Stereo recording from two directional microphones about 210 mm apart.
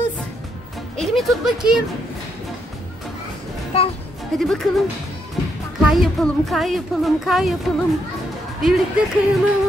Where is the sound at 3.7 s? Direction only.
25° left (ahead or behind).